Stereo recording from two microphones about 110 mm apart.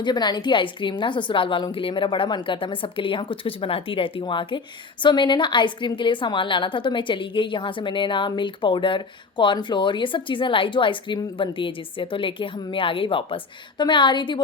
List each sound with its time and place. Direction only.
0.0 s a woman's voice: 40° left (ahead or behind)